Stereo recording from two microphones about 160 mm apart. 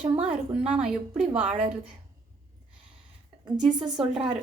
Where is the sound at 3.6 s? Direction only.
25° right (ahead or behind).